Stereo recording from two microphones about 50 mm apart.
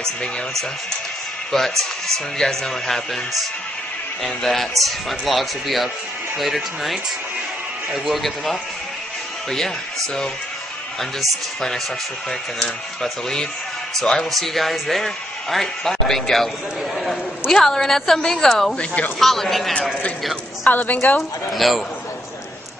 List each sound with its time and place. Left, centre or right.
0.0 s a man's voice: centre
8.0 s a man's voice: centre
11.0 s a man's voice: centre
16.9 s a sound: centre
17.6 s a man's voice: centre
20.6 s a woman's voice: left
21.5 s a man's voice: centre